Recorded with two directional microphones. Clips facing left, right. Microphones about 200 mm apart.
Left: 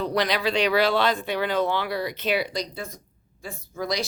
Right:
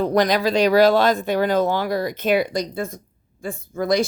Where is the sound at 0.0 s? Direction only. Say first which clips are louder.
Right 6 dB; 45° right (ahead or behind).